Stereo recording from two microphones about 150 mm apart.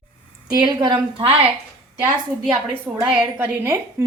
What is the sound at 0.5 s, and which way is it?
Speech, 30° right (ahead or behind).